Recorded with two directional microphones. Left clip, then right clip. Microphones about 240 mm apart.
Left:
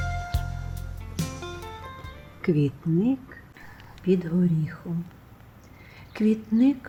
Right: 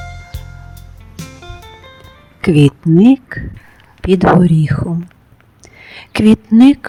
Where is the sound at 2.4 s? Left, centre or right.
Right.